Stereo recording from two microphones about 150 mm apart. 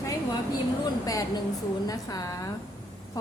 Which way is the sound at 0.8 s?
25° left (ahead or behind).